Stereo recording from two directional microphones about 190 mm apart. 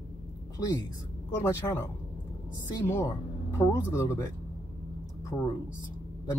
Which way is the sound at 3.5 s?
15° left (ahead or behind).